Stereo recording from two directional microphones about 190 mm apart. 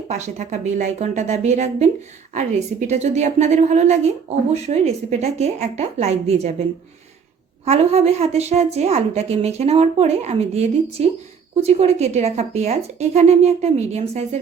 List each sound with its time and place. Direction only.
0.1 s a woman's voice: 35° right (ahead or behind)